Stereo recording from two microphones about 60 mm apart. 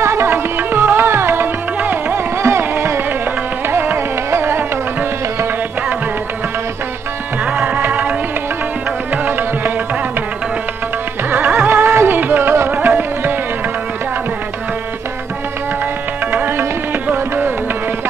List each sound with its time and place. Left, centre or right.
0.0 s music: right
7.4 s tabla: right
9.1 s music: right
11.2 s music: right
16.3 s music: right